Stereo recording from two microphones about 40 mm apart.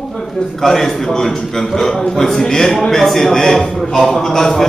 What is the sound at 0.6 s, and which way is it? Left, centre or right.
A man's voice, centre.